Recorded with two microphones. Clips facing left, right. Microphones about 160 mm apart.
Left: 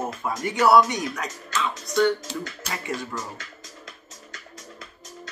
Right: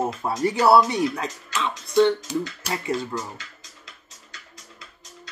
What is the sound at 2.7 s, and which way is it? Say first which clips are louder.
Speech: right 5 dB; 30° right (ahead or behind).